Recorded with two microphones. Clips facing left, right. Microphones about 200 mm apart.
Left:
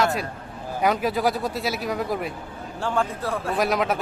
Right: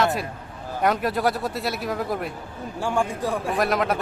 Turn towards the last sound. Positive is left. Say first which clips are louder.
# even
turn(degrees=0)  # may be behind; listen again after turning